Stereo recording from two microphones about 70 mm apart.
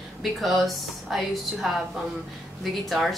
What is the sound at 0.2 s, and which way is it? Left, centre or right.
Speech, centre.